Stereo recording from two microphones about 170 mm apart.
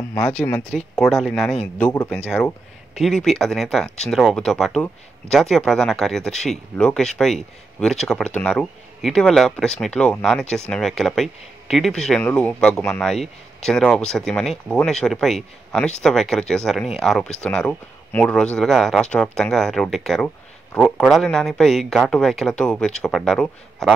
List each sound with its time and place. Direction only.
0.1 s speech: 5° left (ahead or behind)